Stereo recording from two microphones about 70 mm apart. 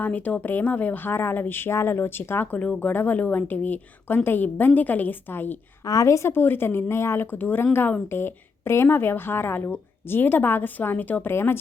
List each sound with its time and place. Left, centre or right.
0.0 s speech: left
5.8 s a woman's voice: left
6.3 s speech: left